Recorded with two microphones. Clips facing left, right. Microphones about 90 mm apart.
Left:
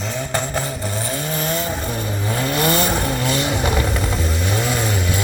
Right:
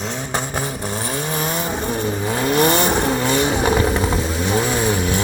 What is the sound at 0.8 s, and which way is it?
Vehicle, 20° right (ahead or behind).